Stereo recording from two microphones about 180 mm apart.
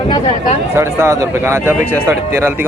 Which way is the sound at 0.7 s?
15° right (ahead or behind).